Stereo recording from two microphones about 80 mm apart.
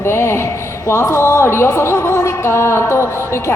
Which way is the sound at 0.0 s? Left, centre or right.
Left.